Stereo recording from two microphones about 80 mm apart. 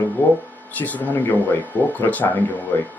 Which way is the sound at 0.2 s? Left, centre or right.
Left.